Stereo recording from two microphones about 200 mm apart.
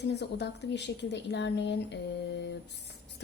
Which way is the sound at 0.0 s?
55° left (ahead or behind).